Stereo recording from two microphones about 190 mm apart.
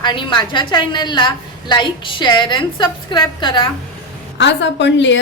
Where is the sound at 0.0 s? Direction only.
25° left (ahead or behind).